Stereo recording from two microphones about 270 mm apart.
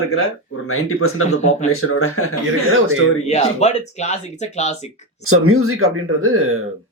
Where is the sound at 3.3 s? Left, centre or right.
Left.